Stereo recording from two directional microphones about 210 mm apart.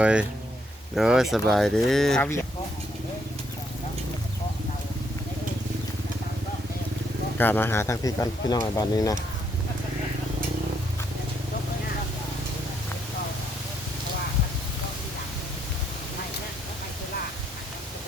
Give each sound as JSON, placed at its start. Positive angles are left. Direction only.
{"t": 0.0, "sound": "speech", "side_deg": -5}
{"t": 7.3, "sound": "speech", "side_deg": 10}